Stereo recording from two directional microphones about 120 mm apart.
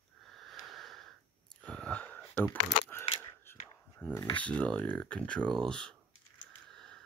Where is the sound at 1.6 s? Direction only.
10° left (ahead or behind).